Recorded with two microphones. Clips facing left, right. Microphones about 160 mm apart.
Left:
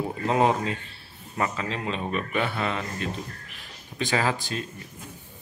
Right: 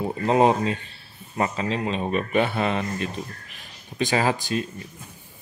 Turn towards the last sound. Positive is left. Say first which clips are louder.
# right 3 dB
turn(degrees=-15)  # may be behind; listen again after turning